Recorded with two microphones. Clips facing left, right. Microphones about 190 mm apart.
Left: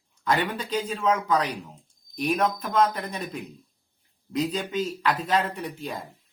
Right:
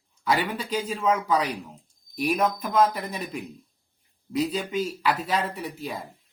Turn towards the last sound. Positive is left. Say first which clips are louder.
# even
turn(degrees=-5)  # may be behind; listen again after turning